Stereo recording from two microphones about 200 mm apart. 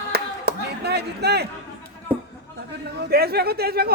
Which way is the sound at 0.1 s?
55° right (ahead or behind).